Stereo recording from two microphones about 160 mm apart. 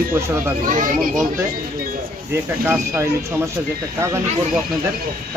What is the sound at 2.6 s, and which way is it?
Speech, 10° right (ahead or behind).